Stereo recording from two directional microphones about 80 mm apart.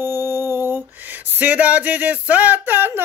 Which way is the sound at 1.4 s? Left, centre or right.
Centre.